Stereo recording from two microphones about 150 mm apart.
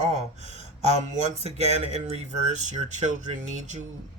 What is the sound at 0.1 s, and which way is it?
A man's voice, 50° right (ahead or behind).